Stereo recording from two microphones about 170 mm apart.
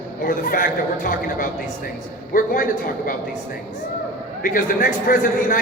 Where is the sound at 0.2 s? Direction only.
55° left (ahead or behind).